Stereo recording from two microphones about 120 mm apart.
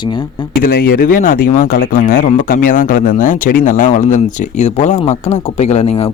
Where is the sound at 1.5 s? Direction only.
90° left; by 6.1 s 60° left (ahead or behind).